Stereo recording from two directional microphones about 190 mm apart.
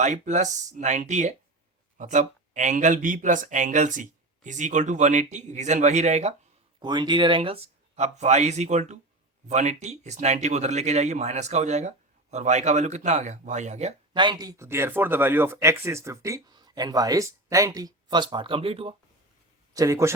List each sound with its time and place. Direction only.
0.0 s speech: 40° right (ahead or behind)
6.7 s speech: 25° right (ahead or behind)
14.1 s speech: 25° right (ahead or behind)
19.7 s speech: 15° right (ahead or behind)